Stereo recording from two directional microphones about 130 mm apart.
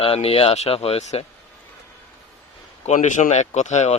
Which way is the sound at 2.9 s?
75° left (ahead or behind).